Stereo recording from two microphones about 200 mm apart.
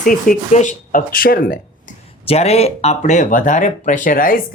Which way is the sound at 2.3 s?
30° left (ahead or behind).